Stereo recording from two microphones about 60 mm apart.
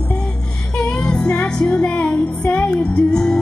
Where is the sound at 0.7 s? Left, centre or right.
Centre.